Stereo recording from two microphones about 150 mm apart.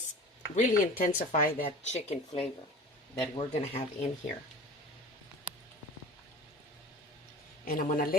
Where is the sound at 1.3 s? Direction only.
65° left (ahead or behind).